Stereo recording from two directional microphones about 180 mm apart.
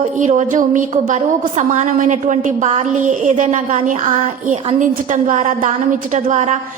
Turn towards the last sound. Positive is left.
turn(degrees=-40)  # may be behind; listen again after turning